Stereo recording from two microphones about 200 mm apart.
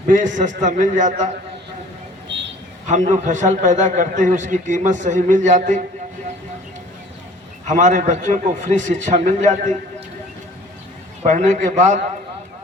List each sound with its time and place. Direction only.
0.3 s a man's voice: 40° right (ahead or behind)
2.3 s a sound: 65° right (ahead or behind)
2.8 s a man's voice: 35° right (ahead or behind)
7.7 s a man's voice: 35° right (ahead or behind)
11.2 s a man's voice: 35° right (ahead or behind)